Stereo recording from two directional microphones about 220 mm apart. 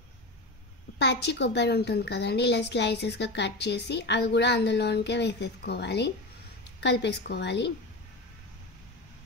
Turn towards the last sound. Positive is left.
turn(degrees=50)  # may be behind; listen again after turning